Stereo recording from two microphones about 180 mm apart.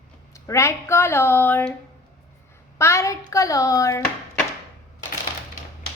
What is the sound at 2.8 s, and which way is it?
Speech, 15° left (ahead or behind).